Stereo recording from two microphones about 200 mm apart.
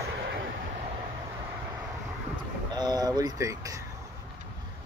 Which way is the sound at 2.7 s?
20° right (ahead or behind).